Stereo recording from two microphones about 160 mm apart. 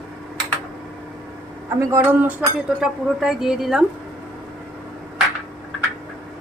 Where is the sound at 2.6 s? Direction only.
5° right (ahead or behind).